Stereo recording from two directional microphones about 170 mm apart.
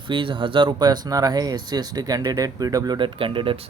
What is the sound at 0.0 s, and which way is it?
Speech, 30° right (ahead or behind).